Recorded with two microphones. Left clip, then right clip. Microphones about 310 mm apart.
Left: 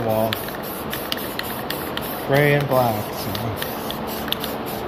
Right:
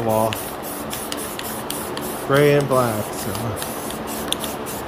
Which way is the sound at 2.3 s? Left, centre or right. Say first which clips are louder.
Right 2 dB; centre.